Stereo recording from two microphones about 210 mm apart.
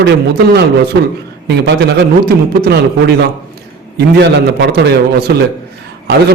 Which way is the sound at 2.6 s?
50° right (ahead or behind).